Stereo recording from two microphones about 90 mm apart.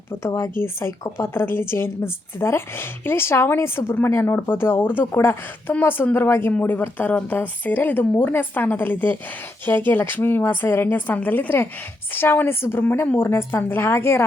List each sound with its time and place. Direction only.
0.1 s speech: 30° left (ahead or behind)